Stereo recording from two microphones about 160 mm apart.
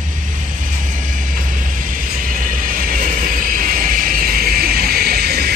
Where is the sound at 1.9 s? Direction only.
60° right (ahead or behind).